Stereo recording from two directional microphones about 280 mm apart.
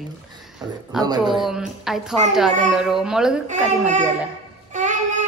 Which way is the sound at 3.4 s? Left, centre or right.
Right.